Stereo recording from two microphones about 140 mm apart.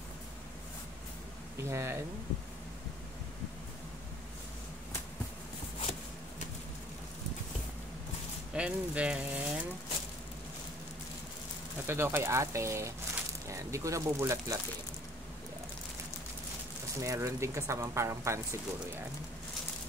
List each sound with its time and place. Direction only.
1.6 s speech: 20° right (ahead or behind)
8.5 s speech: 10° right (ahead or behind)
11.8 s speech: 15° right (ahead or behind)
17.0 s speech: 20° right (ahead or behind)